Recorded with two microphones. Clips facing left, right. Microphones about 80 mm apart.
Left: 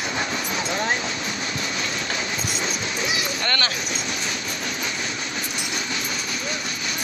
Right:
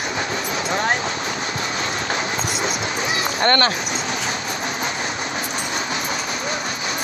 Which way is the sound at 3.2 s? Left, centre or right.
Right.